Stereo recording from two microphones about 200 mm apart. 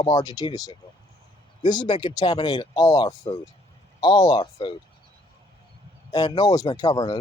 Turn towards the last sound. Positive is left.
turn(degrees=20)  # may be behind; listen again after turning